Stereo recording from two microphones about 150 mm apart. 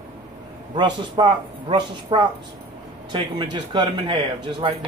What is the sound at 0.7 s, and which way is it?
A man's voice, 30° right (ahead or behind).